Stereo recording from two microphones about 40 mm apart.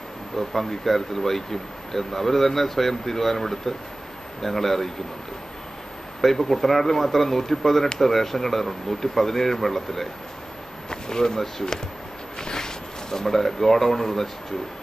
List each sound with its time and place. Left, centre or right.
0.4 s speech: centre
6.2 s speech: centre